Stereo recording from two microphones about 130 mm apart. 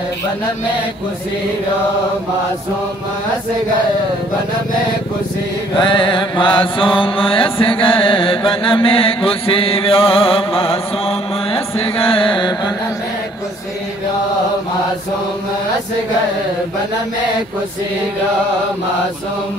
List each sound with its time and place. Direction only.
5.8 s mantra: 35° left (ahead or behind)
7.6 s chant: 40° left (ahead or behind)